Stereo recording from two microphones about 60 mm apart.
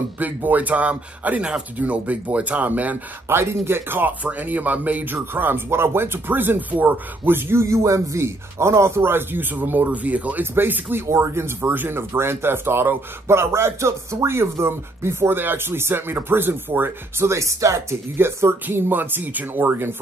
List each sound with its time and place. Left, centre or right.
0.2 s speech: right
3.3 s speech: right
4.2 s speech: right
10.4 s speech: right
17.3 s speech: right
18.1 s speech: right